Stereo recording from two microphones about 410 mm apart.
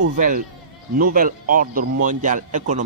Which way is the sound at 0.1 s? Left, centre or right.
Centre.